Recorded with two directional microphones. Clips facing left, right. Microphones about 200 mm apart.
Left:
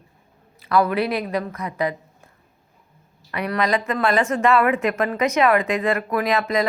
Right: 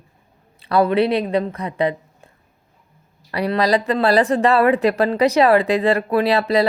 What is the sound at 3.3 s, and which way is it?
A woman's voice, 35° right (ahead or behind).